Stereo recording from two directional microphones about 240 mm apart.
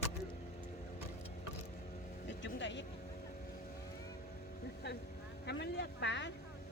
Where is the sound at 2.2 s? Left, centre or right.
Left.